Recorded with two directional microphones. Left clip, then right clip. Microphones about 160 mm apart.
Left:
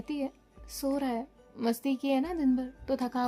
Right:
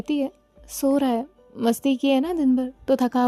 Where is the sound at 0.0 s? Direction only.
45° right (ahead or behind).